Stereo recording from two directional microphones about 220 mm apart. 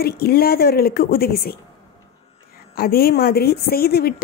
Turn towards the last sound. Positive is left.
turn(degrees=45)  # may be behind; listen again after turning